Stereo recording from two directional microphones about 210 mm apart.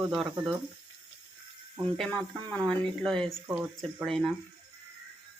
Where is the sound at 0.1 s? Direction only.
Centre (ahead or behind).